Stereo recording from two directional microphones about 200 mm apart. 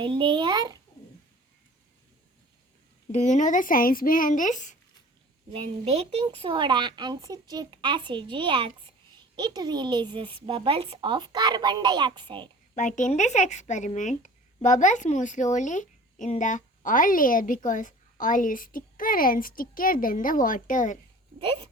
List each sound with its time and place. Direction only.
0.0 s a woman's voice: 25° right (ahead or behind)
3.1 s speech: 35° left (ahead or behind)
5.5 s a woman's voice: 30° right (ahead or behind)
12.7 s a woman's voice: 40° left (ahead or behind)
21.3 s speech: 25° right (ahead or behind)